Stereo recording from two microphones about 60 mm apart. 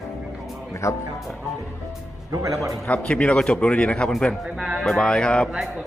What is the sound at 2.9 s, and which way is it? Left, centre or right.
Speech, centre.